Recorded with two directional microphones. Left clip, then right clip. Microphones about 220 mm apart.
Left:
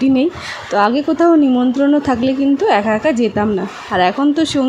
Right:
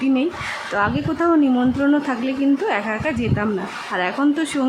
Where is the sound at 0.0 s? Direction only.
25° left (ahead or behind).